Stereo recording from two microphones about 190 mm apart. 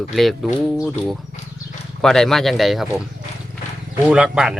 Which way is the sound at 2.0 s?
5° left (ahead or behind).